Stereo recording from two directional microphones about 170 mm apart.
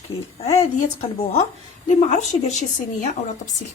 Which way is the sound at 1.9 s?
45° left (ahead or behind).